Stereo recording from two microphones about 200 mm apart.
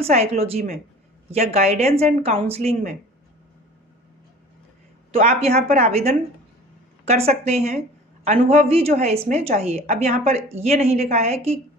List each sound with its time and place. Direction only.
0.0 s a woman's voice: 30° right (ahead or behind)
5.1 s a woman's voice: 30° right (ahead or behind)